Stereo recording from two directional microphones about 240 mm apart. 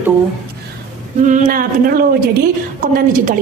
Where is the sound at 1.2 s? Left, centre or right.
Right.